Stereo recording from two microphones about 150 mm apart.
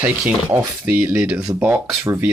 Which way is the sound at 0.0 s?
15° right (ahead or behind).